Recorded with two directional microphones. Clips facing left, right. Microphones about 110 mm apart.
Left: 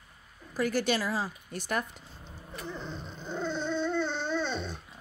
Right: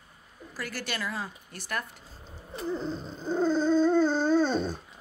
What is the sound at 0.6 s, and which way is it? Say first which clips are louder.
A woman's voice: left 7 dB; 20° left (ahead or behind).